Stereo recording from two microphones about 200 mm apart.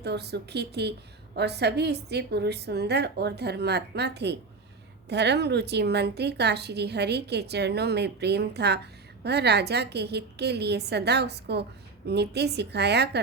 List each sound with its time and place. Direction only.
0.0 s speech: 55° right (ahead or behind)